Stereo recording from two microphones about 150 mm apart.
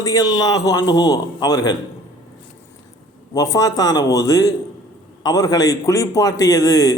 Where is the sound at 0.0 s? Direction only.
25° left (ahead or behind).